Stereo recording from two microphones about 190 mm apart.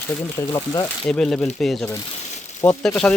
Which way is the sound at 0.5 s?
20° left (ahead or behind).